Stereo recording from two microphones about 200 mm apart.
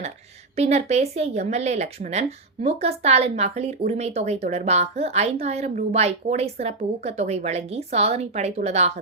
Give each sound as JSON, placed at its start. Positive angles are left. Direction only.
{"t": 0.5, "sound": "speech", "side_deg": -35}